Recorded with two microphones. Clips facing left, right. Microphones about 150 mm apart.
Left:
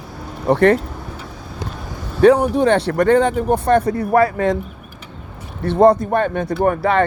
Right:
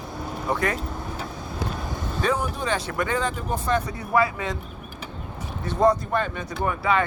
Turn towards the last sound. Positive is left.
turn(degrees=60)  # may be behind; listen again after turning